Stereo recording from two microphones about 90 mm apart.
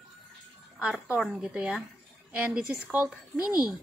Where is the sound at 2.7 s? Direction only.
25° right (ahead or behind).